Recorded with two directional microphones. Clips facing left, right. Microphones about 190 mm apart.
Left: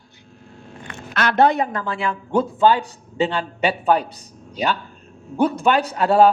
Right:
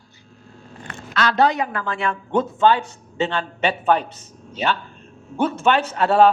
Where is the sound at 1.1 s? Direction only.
55° left (ahead or behind).